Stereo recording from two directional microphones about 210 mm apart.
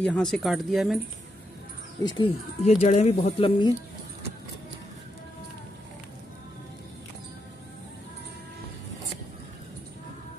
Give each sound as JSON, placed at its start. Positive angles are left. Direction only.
{"t": 0.0, "sound": "speech", "side_deg": 5}
{"t": 2.0, "sound": "speech", "side_deg": 25}